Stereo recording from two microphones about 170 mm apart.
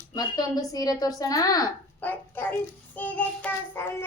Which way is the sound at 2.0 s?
10° left (ahead or behind).